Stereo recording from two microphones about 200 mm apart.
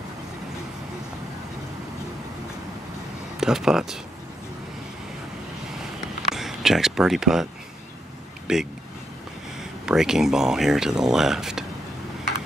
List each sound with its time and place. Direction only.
3.3 s speech: centre (ahead or behind)
6.3 s a sound: centre (ahead or behind)
8.5 s speech: 5° right (ahead or behind)
9.8 s speech: centre (ahead or behind)